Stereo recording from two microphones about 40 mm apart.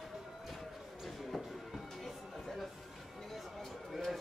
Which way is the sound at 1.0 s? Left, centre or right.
Centre.